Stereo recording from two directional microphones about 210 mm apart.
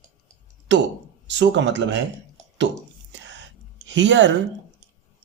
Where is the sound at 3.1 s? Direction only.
60° right (ahead or behind).